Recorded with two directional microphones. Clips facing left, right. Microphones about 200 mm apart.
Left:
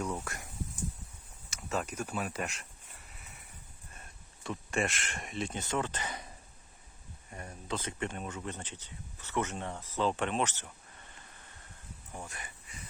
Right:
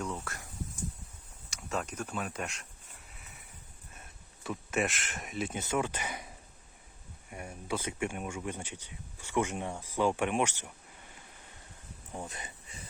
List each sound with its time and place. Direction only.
0.0 s speech: 15° left (ahead or behind)
1.5 s speech: centre (ahead or behind)
3.1 s a sound: centre (ahead or behind)
4.4 s speech: 5° right (ahead or behind)
7.3 s speech: 10° right (ahead or behind)
12.1 s a sound: 20° right (ahead or behind)